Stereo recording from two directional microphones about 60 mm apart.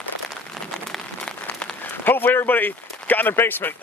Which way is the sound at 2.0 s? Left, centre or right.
Left.